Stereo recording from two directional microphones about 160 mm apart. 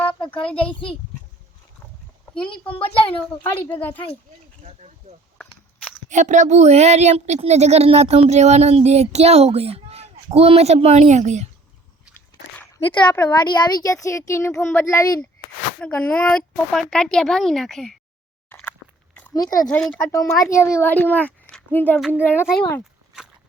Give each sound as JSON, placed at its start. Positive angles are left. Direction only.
{"t": 2.8, "sound": "speech", "side_deg": 35}
{"t": 3.8, "sound": "speech", "side_deg": 10}
{"t": 4.6, "sound": "speech", "side_deg": -45}
{"t": 13.2, "sound": "a child's voice", "side_deg": 25}
{"t": 15.8, "sound": "a woman's voice", "side_deg": 5}
{"t": 18.4, "sound": "a sound", "side_deg": 10}
{"t": 19.3, "sound": "speech", "side_deg": 25}
{"t": 19.6, "sound": "speech", "side_deg": 5}
{"t": 20.0, "sound": "a child's voice", "side_deg": 20}